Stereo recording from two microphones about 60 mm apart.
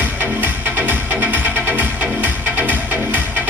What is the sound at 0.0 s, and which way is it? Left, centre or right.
Music, right.